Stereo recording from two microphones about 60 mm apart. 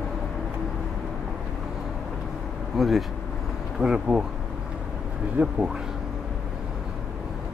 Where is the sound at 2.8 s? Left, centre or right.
Centre.